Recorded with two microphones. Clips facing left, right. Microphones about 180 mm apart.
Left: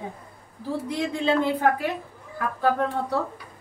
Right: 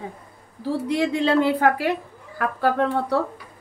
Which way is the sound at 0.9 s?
70° right (ahead or behind).